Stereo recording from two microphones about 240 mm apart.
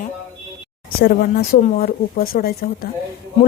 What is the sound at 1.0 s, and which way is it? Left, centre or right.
Speech, left.